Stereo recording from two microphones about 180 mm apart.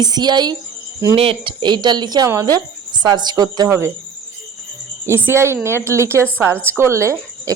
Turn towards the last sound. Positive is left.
turn(degrees=-15)  # may be behind; listen again after turning